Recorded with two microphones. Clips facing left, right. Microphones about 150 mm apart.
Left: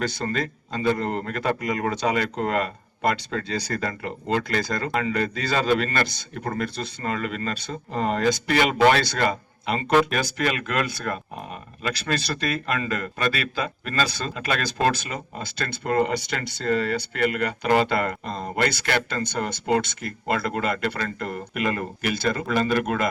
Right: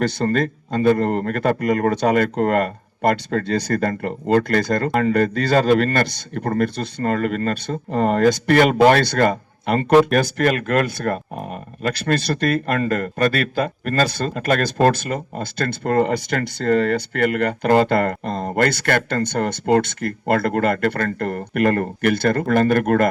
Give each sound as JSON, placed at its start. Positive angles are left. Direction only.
{"t": 0.0, "sound": "speech", "side_deg": -55}
{"t": 9.9, "sound": "speech", "side_deg": -40}
{"t": 10.2, "sound": "speech", "side_deg": -50}